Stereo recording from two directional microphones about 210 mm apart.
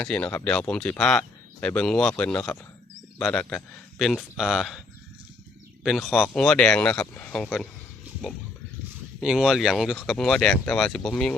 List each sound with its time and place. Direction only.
0.0 s speech: 5° left (ahead or behind)
5.8 s speech: centre (ahead or behind)
9.2 s speech: centre (ahead or behind)